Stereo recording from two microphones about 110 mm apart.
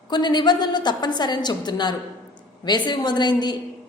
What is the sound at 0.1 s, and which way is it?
A woman's voice, 40° left (ahead or behind).